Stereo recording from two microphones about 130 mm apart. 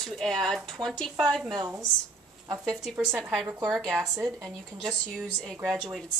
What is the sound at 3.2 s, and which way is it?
Speech, centre (ahead or behind).